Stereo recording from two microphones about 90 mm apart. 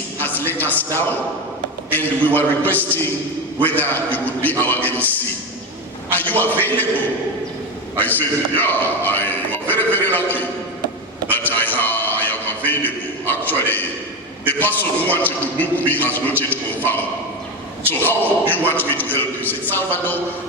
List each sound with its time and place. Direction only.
0.2 s a man's voice: 20° left (ahead or behind)
6.1 s a man's voice: 20° left (ahead or behind)
8.5 s a sound: 20° left (ahead or behind)
13.5 s a man's voice: 20° left (ahead or behind)
18.0 s a man's voice: 20° left (ahead or behind)